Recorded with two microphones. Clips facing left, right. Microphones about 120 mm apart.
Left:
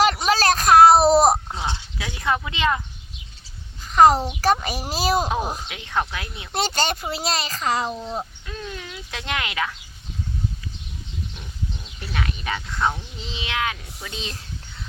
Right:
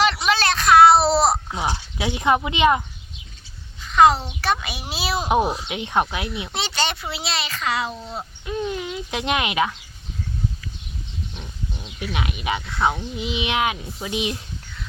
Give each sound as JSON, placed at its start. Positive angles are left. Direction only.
{"t": 0.0, "sound": "a sound", "side_deg": 40}
{"t": 1.7, "sound": "speech", "side_deg": -20}
{"t": 3.8, "sound": "a child's voice", "side_deg": 40}
{"t": 5.6, "sound": "speech", "side_deg": -20}
{"t": 6.5, "sound": "a child's voice", "side_deg": 45}
{"t": 7.9, "sound": "speech", "side_deg": 10}
{"t": 8.4, "sound": "speech", "side_deg": -20}
{"t": 11.8, "sound": "sheep", "side_deg": -5}
{"t": 12.1, "sound": "child singing", "side_deg": -15}